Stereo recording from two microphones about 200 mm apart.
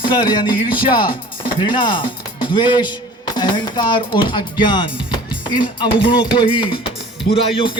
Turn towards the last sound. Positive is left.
turn(degrees=30)  # may be behind; listen again after turning